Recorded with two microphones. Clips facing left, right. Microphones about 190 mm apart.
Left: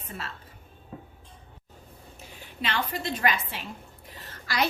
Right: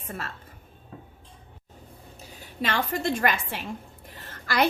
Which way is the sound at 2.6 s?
45° right (ahead or behind).